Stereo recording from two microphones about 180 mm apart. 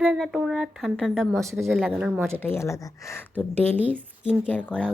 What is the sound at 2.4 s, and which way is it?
Speech, 15° left (ahead or behind).